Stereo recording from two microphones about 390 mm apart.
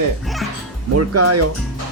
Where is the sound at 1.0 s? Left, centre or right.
Right.